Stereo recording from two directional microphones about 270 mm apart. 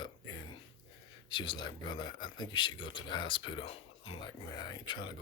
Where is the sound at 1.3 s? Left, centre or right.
Centre.